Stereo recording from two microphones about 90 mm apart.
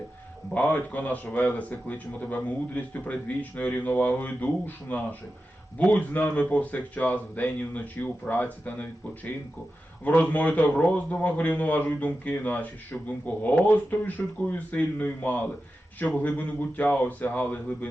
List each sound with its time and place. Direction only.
0.5 s a man's voice: 15° left (ahead or behind)